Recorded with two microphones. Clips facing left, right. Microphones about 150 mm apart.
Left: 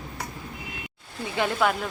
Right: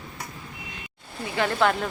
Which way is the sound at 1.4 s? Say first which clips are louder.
Right 1 dB; 20° left (ahead or behind).